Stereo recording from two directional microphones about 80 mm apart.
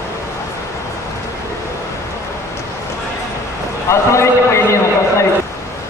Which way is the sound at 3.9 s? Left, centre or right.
Left.